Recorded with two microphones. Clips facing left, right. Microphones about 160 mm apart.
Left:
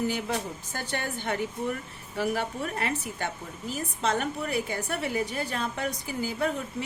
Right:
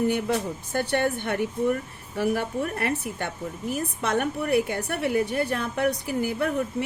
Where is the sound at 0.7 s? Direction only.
60° right (ahead or behind).